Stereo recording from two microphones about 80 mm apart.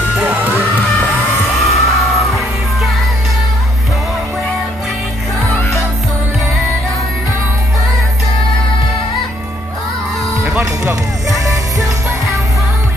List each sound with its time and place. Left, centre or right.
0.1 s music: right
1.6 s music: centre
5.6 s music: left
10.4 s music: right